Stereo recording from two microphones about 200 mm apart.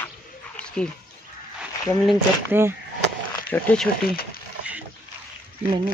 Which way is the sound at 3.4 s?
5° left (ahead or behind).